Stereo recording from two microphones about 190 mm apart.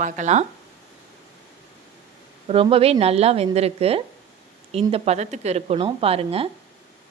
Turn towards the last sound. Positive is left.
turn(degrees=-30)  # may be behind; listen again after turning